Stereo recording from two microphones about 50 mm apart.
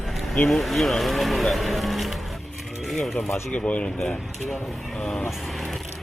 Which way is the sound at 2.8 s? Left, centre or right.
Centre.